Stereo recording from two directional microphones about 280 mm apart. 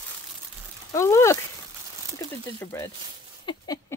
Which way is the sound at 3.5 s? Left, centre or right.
Centre.